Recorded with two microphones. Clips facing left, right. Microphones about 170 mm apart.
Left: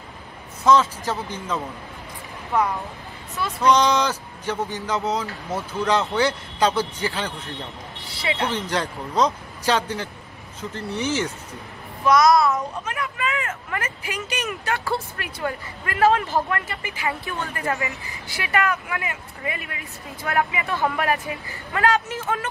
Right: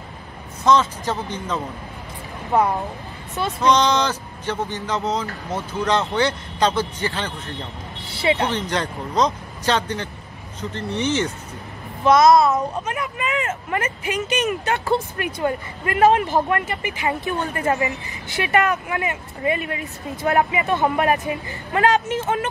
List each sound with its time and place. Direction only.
0.7 s speech: 5° left (ahead or behind)
3.6 s speech: 10° left (ahead or behind)
8.1 s speech: 25° right (ahead or behind)
8.5 s speech: 5° left (ahead or behind)
12.0 s speech: 25° right (ahead or behind)